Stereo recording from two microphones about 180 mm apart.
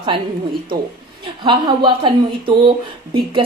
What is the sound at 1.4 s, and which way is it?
A woman's voice, 25° right (ahead or behind).